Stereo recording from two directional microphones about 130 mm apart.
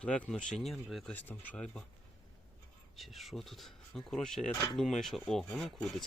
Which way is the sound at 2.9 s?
Centre (ahead or behind).